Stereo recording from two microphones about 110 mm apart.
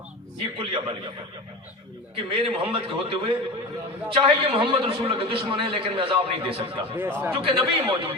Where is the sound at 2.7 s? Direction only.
55° right (ahead or behind).